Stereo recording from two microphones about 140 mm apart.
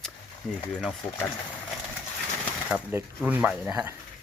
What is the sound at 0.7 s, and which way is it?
Speech, centre (ahead or behind).